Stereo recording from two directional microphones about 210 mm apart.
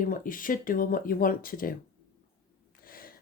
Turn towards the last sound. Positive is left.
turn(degrees=45)  # may be behind; listen again after turning